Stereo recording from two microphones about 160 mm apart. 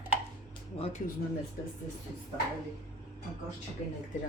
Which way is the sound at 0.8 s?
40° left (ahead or behind).